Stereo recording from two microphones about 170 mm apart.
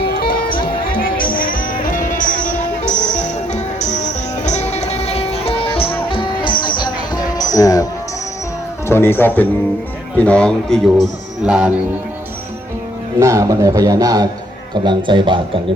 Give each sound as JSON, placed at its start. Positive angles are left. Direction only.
{"t": 0.1, "sound": "music", "side_deg": 65}
{"t": 8.9, "sound": "speech", "side_deg": 15}
{"t": 13.1, "sound": "a man's voice", "side_deg": -15}